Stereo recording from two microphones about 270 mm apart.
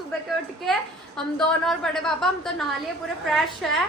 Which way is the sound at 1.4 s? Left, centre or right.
Centre.